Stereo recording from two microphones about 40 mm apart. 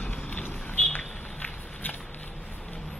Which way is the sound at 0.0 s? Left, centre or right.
Left.